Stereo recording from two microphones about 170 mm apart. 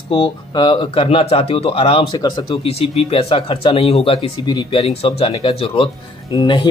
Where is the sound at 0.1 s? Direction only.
30° left (ahead or behind).